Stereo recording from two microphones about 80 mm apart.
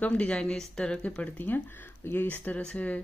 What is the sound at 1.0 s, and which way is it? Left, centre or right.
Speech, left.